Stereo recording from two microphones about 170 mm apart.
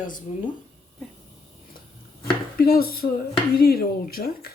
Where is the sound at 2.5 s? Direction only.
60° left (ahead or behind).